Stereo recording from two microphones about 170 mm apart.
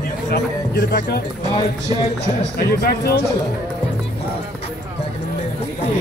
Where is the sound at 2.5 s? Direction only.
65° left (ahead or behind).